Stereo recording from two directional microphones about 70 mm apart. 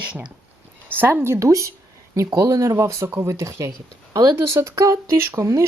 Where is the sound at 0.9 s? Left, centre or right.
Right.